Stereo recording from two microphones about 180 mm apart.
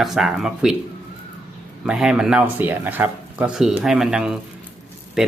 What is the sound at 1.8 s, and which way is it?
Speech, 5° right (ahead or behind).